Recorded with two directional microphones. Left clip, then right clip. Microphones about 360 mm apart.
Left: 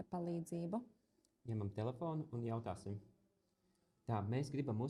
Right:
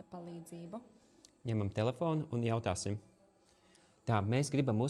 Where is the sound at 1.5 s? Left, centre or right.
Right.